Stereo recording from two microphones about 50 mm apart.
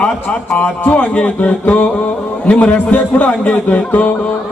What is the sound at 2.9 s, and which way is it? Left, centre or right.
A man's voice, left.